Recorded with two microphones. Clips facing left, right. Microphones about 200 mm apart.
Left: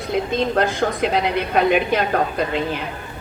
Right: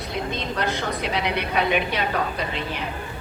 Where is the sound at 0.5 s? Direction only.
50° left (ahead or behind).